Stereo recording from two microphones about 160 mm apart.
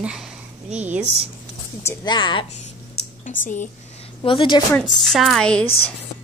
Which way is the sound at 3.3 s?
55° left (ahead or behind).